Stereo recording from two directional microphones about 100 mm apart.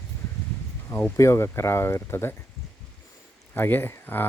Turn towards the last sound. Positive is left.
turn(degrees=20)  # may be behind; listen again after turning